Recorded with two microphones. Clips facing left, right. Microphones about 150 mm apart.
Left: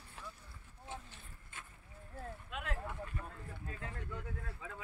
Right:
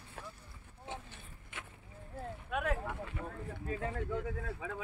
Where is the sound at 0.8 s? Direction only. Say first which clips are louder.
Right 3 dB; 65° right (ahead or behind).